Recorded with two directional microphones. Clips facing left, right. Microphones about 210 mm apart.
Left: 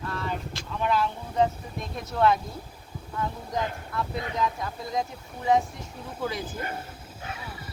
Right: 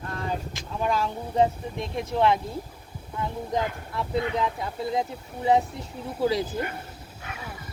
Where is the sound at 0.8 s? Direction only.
40° right (ahead or behind).